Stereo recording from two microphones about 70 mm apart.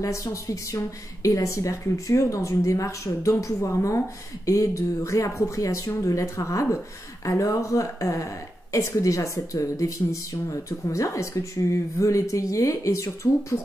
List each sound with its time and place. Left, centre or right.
0.0 s speech: left